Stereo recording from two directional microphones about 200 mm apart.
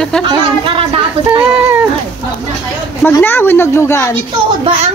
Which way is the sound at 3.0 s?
10° left (ahead or behind).